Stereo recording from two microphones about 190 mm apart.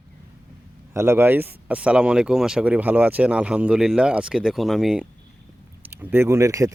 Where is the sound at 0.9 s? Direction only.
15° right (ahead or behind).